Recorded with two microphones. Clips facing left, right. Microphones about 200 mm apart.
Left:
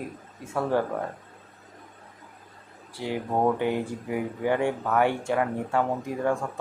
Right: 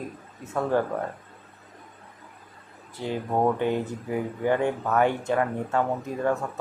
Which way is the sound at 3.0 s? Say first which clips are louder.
Right 1 dB; 15° left (ahead or behind).